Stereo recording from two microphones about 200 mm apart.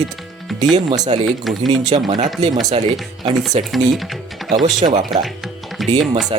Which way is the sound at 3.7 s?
Centre (ahead or behind).